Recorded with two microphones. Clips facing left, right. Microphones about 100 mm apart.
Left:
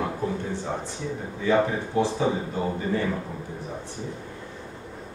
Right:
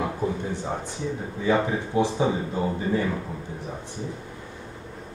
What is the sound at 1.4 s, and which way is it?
Speech, 15° right (ahead or behind).